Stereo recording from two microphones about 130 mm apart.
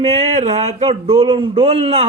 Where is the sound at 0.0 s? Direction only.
55° right (ahead or behind).